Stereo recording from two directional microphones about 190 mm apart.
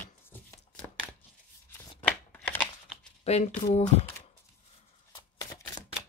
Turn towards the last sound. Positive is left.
turn(degrees=20)  # may be behind; listen again after turning